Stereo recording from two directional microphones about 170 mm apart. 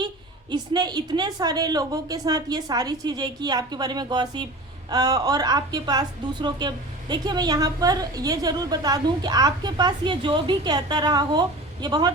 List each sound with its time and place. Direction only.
0.5 s a woman's voice: 25° right (ahead or behind)